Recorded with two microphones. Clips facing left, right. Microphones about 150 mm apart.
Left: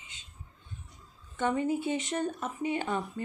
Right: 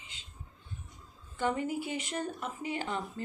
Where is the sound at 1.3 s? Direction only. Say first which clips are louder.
Left 3 dB; 25° left (ahead or behind).